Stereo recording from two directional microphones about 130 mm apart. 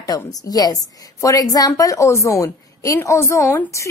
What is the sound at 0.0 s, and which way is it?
A woman's voice, 25° left (ahead or behind).